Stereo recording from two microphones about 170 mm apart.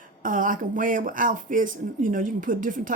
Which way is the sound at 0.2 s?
50° right (ahead or behind).